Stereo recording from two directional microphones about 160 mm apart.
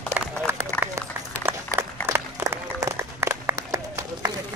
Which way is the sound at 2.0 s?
15° right (ahead or behind).